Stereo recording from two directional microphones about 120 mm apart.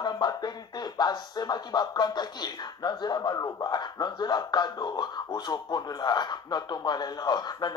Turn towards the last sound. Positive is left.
turn(degrees=35)  # may be behind; listen again after turning